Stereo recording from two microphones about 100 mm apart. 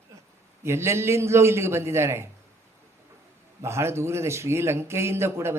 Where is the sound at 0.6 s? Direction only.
25° right (ahead or behind).